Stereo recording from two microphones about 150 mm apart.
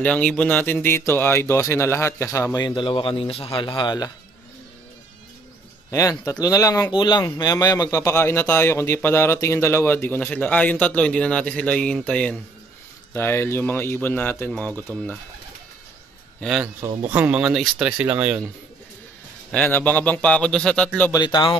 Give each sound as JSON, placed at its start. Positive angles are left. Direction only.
{"t": 0.0, "sound": "a man's voice", "side_deg": 5}
{"t": 2.7, "sound": "a man's voice", "side_deg": 35}
{"t": 5.9, "sound": "a man's voice", "side_deg": 20}
{"t": 16.3, "sound": "a man's voice", "side_deg": -5}
{"t": 19.5, "sound": "a man's voice", "side_deg": 10}
{"t": 21.1, "sound": "speech", "side_deg": 30}